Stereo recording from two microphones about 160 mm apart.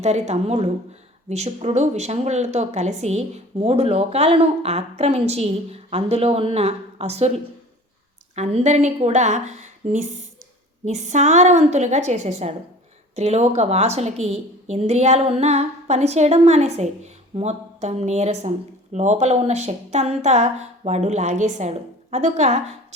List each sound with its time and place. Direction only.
0.0 s a woman's voice: 45° right (ahead or behind)
8.4 s a woman's voice: 45° right (ahead or behind)